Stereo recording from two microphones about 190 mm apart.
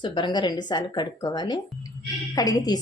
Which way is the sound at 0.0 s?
25° left (ahead or behind).